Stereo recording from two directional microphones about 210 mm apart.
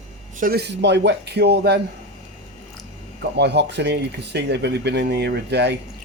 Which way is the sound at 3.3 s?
55° right (ahead or behind).